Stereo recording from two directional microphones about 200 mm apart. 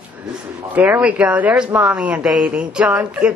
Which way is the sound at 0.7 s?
5° right (ahead or behind).